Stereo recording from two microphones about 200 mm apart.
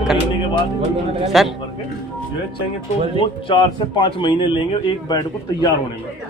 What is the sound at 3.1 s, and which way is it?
Speech, 25° left (ahead or behind).